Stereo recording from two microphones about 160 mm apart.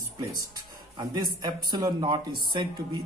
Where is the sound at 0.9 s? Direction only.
25° right (ahead or behind).